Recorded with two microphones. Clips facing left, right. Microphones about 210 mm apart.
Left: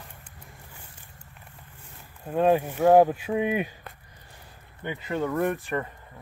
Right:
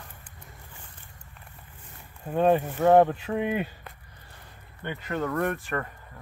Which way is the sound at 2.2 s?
Centre (ahead or behind).